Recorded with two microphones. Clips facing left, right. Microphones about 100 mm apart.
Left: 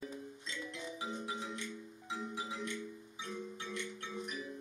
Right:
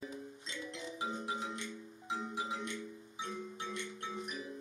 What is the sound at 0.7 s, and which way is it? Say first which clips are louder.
Music: right 3 dB; 25° right (ahead or behind).